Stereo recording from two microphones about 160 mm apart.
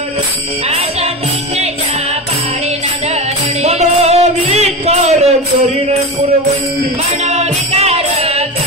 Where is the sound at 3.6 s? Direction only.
40° right (ahead or behind).